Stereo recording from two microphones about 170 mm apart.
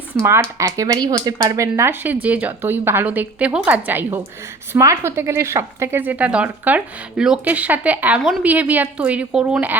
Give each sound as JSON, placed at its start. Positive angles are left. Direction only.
{"t": 0.1, "sound": "a woman's voice", "side_deg": -15}